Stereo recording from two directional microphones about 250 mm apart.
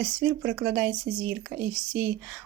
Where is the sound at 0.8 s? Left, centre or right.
Right.